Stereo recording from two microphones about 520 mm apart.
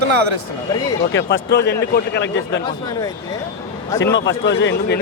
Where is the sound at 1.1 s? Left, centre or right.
Left.